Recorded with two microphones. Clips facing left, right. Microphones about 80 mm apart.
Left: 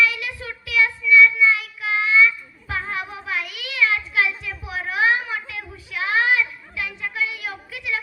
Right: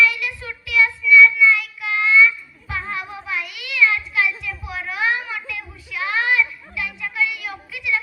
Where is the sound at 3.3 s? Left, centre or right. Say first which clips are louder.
Right 1 dB; left.